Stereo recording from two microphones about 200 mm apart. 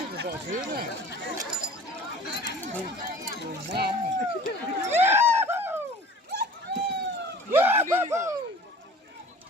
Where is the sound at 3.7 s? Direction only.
55° right (ahead or behind).